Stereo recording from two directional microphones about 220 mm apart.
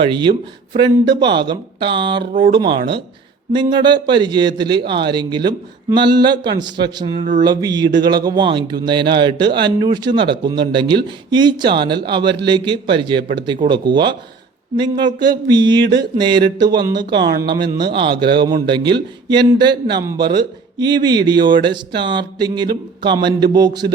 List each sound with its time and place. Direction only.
0.0 s speech: 20° right (ahead or behind)